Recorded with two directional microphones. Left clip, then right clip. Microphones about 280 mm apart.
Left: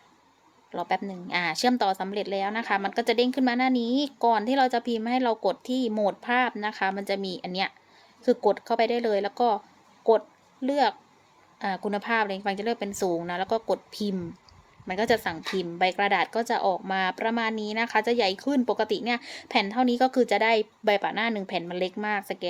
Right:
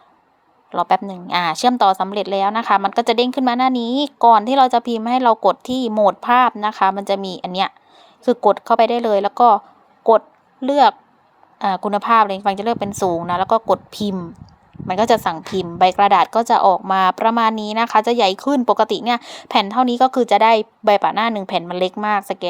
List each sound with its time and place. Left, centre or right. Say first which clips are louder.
0.7 s speech: right 11 dB; centre
10.0 s a sound: right 9 dB; centre
11.6 s a woman's voice: right 11 dB; centre